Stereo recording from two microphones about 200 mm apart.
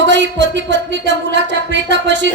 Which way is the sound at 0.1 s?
60° right (ahead or behind).